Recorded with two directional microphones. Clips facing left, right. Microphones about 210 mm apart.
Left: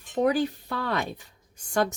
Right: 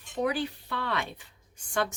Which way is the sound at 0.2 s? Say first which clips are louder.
Left 6 dB; 45° left (ahead or behind).